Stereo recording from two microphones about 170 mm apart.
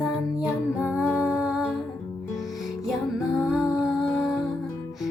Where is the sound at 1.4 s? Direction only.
5° right (ahead or behind).